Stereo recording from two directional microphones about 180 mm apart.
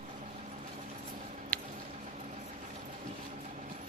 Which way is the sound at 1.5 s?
10° left (ahead or behind).